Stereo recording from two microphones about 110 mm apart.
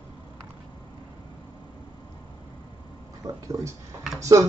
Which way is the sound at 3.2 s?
30° right (ahead or behind).